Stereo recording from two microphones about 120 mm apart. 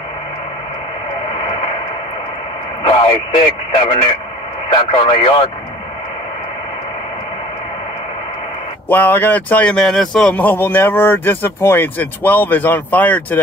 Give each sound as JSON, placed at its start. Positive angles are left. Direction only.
{"t": 2.8, "sound": "speech", "side_deg": 40}
{"t": 8.8, "sound": "speech", "side_deg": 15}